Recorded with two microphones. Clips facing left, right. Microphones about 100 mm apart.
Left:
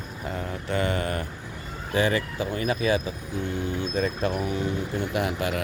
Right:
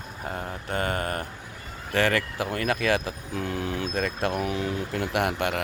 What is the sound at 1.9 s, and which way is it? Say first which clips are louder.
Speech: even; 65° right (ahead or behind).